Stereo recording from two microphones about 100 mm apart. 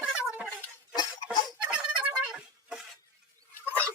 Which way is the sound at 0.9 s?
45° left (ahead or behind).